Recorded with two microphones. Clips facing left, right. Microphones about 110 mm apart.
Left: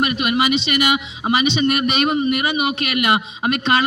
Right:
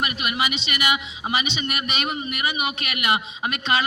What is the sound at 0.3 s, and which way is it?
A man's voice, 40° left (ahead or behind).